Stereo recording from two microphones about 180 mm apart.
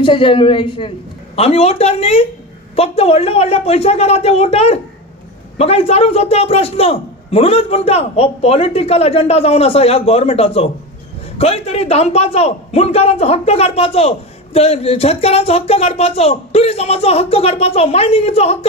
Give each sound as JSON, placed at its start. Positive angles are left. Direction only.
{"t": 0.0, "sound": "a man's voice", "side_deg": 30}